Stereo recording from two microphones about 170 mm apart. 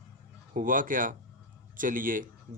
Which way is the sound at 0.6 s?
50° right (ahead or behind).